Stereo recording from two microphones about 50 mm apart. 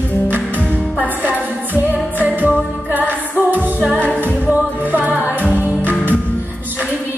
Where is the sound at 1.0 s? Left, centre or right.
Right.